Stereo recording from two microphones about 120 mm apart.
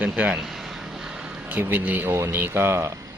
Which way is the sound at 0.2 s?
5° right (ahead or behind).